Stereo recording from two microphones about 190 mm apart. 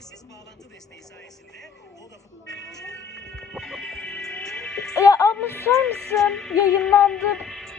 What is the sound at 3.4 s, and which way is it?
Music, centre (ahead or behind).